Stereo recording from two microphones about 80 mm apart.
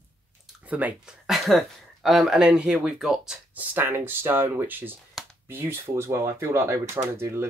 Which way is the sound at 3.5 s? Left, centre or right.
Right.